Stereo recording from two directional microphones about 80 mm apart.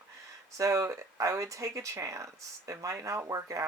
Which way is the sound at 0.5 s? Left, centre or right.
Right.